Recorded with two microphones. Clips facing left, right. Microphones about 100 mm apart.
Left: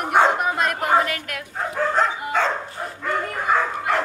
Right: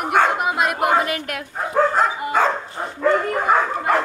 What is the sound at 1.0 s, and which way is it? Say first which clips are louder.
Speech: right 2 dB; 25° right (ahead or behind).